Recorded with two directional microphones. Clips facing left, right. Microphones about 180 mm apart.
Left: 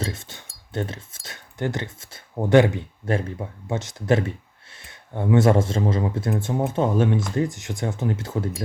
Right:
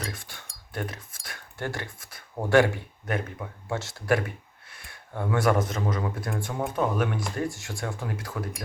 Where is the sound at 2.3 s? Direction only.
20° left (ahead or behind).